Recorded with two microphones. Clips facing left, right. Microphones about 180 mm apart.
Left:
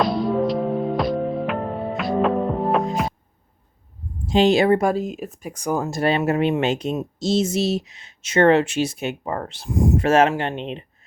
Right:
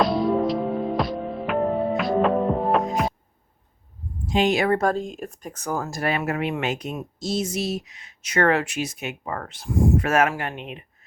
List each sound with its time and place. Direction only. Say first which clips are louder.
0.0 s music: even; centre (ahead or behind)
4.3 s speech: left 5 dB; 30° left (ahead or behind)
4.8 s speech: left 2 dB; 10° left (ahead or behind); by 10.8 s 30° left (ahead or behind)